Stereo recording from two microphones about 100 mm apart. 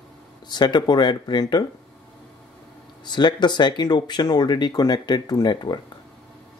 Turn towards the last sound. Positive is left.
turn(degrees=45)  # may be behind; listen again after turning